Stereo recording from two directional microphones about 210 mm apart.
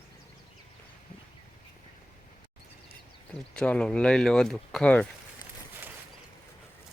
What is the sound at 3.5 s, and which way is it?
Speech, 5° left (ahead or behind).